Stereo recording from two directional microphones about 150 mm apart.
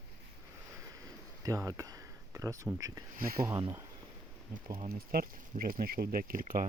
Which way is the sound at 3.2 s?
75° right (ahead or behind).